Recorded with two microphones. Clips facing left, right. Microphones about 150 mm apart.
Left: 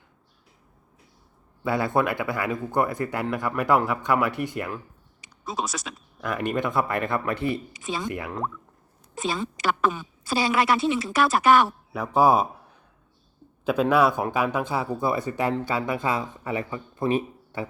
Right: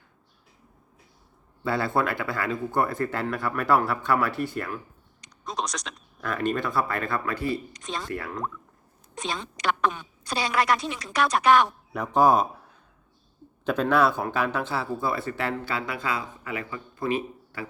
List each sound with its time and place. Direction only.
1.6 s speech: 15° left (ahead or behind)
5.2 s a sound: 5° left (ahead or behind)
6.3 s speech: 15° left (ahead or behind)
7.7 s a woman's voice: 5° left (ahead or behind)
8.0 s speech: 15° left (ahead or behind)
9.1 s a woman's voice: 5° left (ahead or behind)
13.7 s speech: 10° left (ahead or behind); by 17.1 s 25° left (ahead or behind)